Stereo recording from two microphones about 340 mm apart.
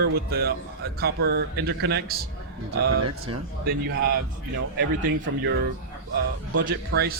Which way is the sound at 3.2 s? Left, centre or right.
Right.